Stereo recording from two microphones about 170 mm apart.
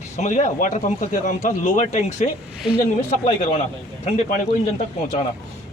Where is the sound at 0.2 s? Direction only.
45° left (ahead or behind).